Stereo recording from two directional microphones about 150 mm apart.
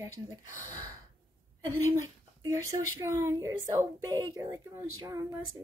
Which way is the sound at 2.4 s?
20° right (ahead or behind).